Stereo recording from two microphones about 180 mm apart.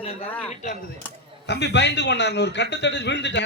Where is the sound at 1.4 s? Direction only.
70° left (ahead or behind).